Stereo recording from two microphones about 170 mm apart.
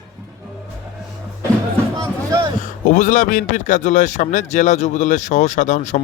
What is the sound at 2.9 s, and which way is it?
Speech, 45° left (ahead or behind).